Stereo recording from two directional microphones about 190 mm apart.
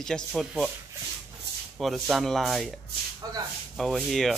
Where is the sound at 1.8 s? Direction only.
Centre (ahead or behind).